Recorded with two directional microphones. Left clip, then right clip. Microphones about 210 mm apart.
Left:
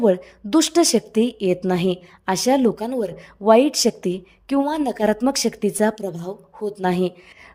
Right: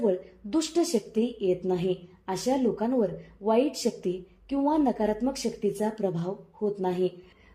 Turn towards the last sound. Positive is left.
turn(degrees=35)  # may be behind; listen again after turning